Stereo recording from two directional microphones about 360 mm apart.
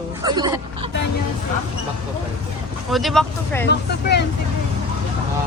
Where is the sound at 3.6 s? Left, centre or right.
Left.